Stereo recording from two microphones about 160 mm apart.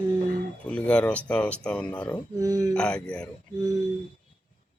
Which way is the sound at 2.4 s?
20° right (ahead or behind).